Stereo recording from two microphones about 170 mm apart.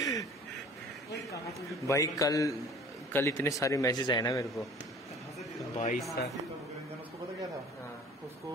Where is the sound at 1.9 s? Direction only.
20° left (ahead or behind).